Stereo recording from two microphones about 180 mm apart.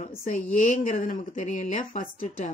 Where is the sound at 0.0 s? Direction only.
50° left (ahead or behind).